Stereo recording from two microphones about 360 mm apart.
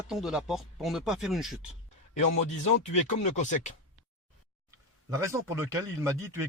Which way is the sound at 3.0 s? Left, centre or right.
Centre.